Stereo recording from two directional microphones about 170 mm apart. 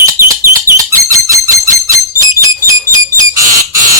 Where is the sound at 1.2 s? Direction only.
20° right (ahead or behind).